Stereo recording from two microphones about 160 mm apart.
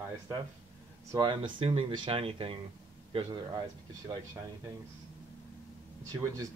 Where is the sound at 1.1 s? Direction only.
30° right (ahead or behind).